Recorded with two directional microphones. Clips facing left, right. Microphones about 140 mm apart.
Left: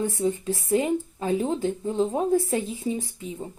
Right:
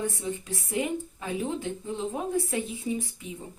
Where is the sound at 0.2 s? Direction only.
30° left (ahead or behind).